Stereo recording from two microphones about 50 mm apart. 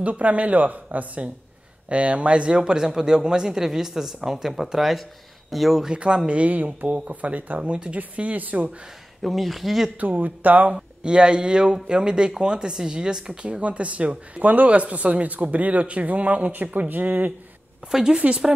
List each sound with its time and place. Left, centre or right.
0.0 s speech: right; by 5.9 s centre
5.9 s speech: centre
9.2 s speech: centre
9.9 s speech: right
10.7 s speech: centre
18.1 s speech: right